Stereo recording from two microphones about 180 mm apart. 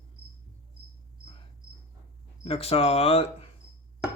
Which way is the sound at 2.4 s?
35° left (ahead or behind).